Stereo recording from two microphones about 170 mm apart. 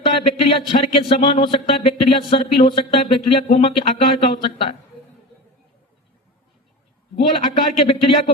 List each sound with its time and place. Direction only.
0.0 s speech: 35° left (ahead or behind)
7.4 s speech: 30° left (ahead or behind)